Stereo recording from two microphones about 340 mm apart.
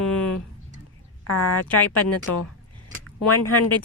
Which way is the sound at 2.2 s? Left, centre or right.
Left.